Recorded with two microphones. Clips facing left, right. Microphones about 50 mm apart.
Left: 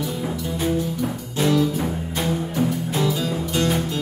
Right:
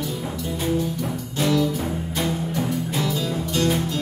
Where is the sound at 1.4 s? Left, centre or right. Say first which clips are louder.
Left 2 dB; left.